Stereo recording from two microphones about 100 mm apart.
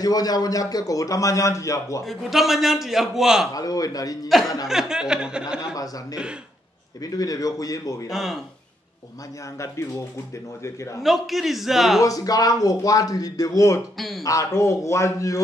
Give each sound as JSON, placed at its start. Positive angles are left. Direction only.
{"t": 0.0, "sound": "a man's voice", "side_deg": 40}
{"t": 2.0, "sound": "a man's voice", "side_deg": 0}
{"t": 3.5, "sound": "a man's voice", "side_deg": 35}
{"t": 4.6, "sound": "speech", "side_deg": -5}
{"t": 7.0, "sound": "a man's voice", "side_deg": 35}
{"t": 8.1, "sound": "a man's voice", "side_deg": 0}
{"t": 9.6, "sound": "a man's voice", "side_deg": 30}
{"t": 11.0, "sound": "a man's voice", "side_deg": 0}
{"t": 12.0, "sound": "a man's voice", "side_deg": 35}
{"t": 13.9, "sound": "a man's voice", "side_deg": 0}
{"t": 14.2, "sound": "a man's voice", "side_deg": 30}